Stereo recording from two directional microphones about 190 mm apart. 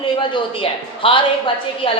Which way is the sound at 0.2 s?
25° left (ahead or behind).